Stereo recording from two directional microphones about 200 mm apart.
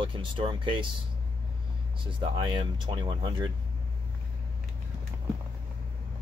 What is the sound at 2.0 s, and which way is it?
Speech, 25° right (ahead or behind).